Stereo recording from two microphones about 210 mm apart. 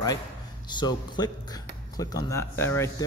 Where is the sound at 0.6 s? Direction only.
20° left (ahead or behind).